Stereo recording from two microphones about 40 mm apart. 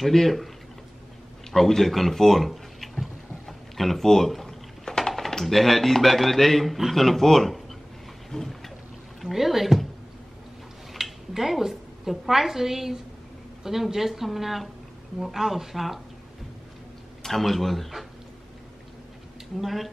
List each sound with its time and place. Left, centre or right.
0.0 s speech: centre
1.5 s a sound: centre
4.8 s a sound: centre
5.4 s speech: centre
8.3 s a sound: centre
9.2 s speech: centre
10.9 s a woman's voice: centre
17.2 s speech: centre
19.6 s speech: centre